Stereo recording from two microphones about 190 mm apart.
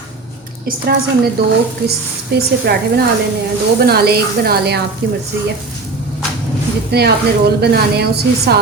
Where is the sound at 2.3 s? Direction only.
60° right (ahead or behind).